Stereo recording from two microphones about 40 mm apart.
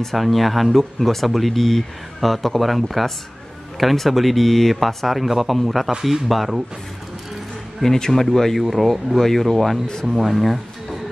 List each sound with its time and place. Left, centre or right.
0.0 s speech: centre
7.8 s speech: centre